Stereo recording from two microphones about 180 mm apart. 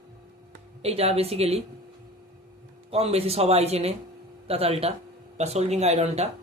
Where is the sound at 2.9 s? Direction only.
35° right (ahead or behind).